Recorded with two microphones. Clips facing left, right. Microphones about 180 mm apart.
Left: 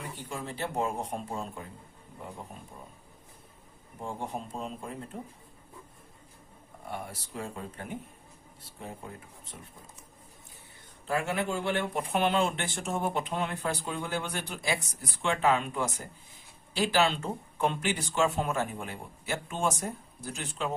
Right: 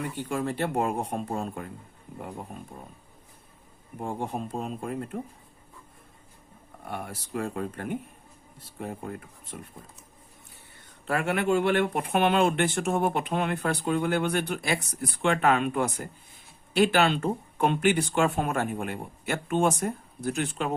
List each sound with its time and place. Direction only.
0.2 s speech: 65° right (ahead or behind)
4.0 s speech: 55° right (ahead or behind)
6.8 s speech: 60° right (ahead or behind)
11.0 s speech: 65° right (ahead or behind)